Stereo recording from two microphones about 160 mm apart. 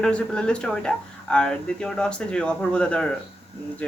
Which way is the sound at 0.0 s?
5° left (ahead or behind).